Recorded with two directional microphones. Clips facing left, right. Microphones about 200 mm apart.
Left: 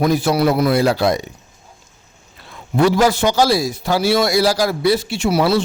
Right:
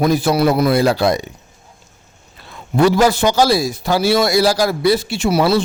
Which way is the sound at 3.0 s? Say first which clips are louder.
Right 1 dB; 40° right (ahead or behind).